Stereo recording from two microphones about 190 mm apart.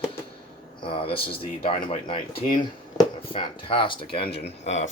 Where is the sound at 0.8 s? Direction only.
30° left (ahead or behind).